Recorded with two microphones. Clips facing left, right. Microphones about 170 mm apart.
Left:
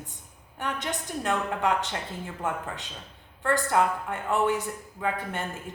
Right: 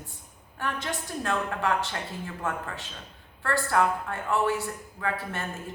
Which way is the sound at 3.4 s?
20° left (ahead or behind).